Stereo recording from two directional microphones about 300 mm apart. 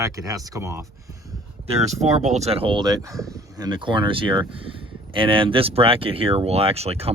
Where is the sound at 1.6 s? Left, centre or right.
Right.